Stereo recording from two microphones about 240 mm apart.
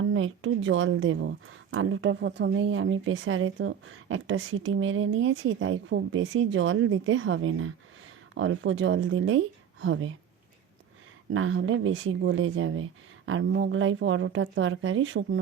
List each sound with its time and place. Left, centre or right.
0.1 s speech: right
11.3 s speech: right